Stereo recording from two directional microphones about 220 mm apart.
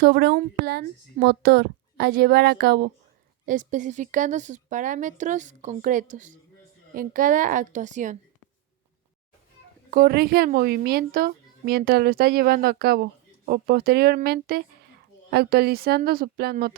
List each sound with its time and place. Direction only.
0.0 s a woman's voice: 45° right (ahead or behind)
9.9 s a woman's voice: 45° right (ahead or behind)